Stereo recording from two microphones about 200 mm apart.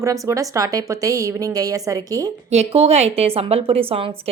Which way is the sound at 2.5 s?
30° right (ahead or behind).